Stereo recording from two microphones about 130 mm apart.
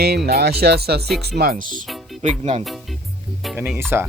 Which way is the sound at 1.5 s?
90° right.